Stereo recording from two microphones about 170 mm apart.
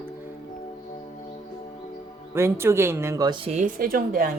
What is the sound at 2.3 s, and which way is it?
Speech, 15° right (ahead or behind).